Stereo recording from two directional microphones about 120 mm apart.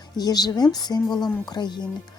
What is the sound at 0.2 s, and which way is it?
A woman's voice, 35° left (ahead or behind).